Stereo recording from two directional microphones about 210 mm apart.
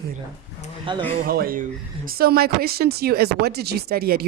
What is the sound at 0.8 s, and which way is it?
Speech, 25° right (ahead or behind).